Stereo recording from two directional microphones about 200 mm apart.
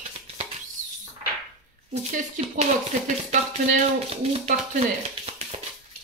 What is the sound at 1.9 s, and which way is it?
Speech, 35° right (ahead or behind).